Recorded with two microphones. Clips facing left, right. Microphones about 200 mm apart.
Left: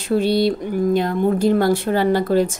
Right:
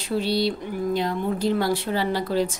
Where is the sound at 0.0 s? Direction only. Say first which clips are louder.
Left 6 dB; 50° left (ahead or behind).